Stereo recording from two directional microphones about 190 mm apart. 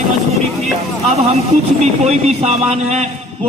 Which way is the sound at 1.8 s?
35° right (ahead or behind).